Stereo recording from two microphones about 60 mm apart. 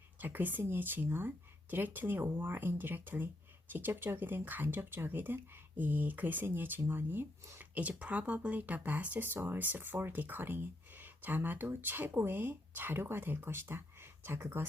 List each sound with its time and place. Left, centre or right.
0.2 s speech: right
7.8 s speech: right